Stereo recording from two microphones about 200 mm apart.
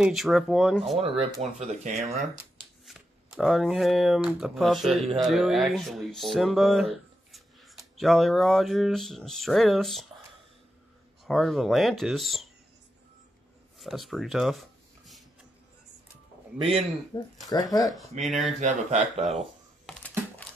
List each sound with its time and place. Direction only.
0.0 s speech: centre (ahead or behind)
0.9 s speech: 30° right (ahead or behind)
2.8 s speech: centre (ahead or behind)
11.2 s speech: centre (ahead or behind)
13.7 s writing: centre (ahead or behind)
17.1 s speech: 20° left (ahead or behind)
18.2 s speech: centre (ahead or behind)
18.6 s speech: 35° right (ahead or behind)
19.9 s computer keyboard: 5° left (ahead or behind)